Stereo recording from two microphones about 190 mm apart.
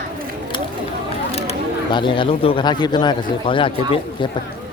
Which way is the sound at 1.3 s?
30° left (ahead or behind).